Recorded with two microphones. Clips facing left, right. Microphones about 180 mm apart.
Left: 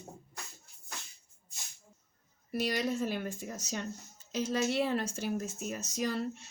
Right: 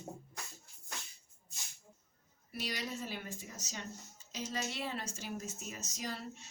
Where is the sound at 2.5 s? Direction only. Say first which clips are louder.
Left 9 dB; 50° left (ahead or behind).